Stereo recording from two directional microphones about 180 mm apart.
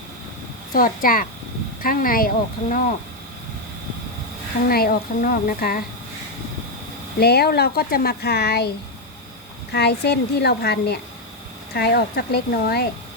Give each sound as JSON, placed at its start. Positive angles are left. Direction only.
{"t": 0.7, "sound": "speech", "side_deg": 50}
{"t": 4.7, "sound": "speech", "side_deg": 55}
{"t": 7.2, "sound": "speech", "side_deg": 60}
{"t": 9.7, "sound": "speech", "side_deg": 65}